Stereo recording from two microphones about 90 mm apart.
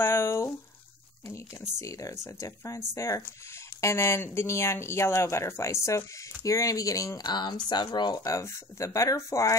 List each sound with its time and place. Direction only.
0.0 s a sound: 30° left (ahead or behind)
1.8 s speech: 35° left (ahead or behind)
7.2 s speech: 55° left (ahead or behind)
8.2 s speech: 35° left (ahead or behind)